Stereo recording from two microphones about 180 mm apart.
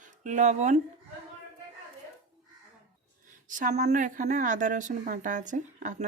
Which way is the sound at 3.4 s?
45° right (ahead or behind).